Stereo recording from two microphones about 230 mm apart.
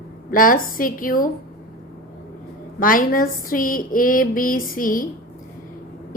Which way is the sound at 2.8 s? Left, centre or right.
Left.